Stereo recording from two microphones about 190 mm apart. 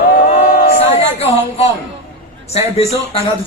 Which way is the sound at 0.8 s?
35° left (ahead or behind).